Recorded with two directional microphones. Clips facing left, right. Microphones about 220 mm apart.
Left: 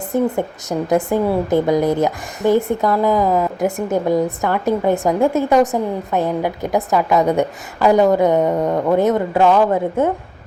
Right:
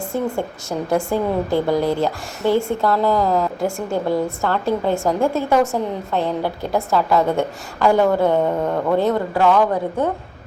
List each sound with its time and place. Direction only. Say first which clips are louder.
0.1 s a woman's voice: left 6 dB; 20° left (ahead or behind)